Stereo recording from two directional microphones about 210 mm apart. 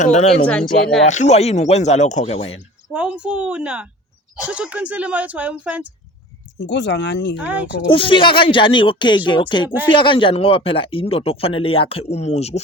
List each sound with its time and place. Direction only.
0.0 s speech: 35° left (ahead or behind)
0.4 s a woman's voice: 5° left (ahead or behind)
1.0 s speech: 35° left (ahead or behind)
2.9 s a woman's voice: 5° right (ahead or behind)
6.6 s speech: 60° left (ahead or behind)
7.9 s speech: 25° left (ahead or behind)